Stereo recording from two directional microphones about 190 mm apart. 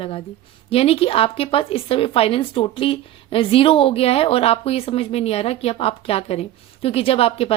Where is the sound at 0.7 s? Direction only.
30° left (ahead or behind).